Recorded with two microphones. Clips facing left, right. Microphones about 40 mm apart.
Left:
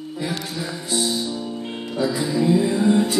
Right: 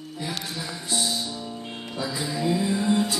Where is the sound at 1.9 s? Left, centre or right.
Left.